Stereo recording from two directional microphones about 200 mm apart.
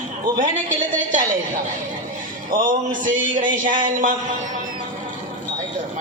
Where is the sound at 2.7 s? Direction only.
40° right (ahead or behind).